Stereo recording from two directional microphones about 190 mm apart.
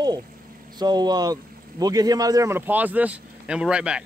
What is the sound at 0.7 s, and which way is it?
A man's voice, 20° right (ahead or behind).